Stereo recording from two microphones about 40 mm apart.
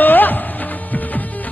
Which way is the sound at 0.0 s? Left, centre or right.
Left.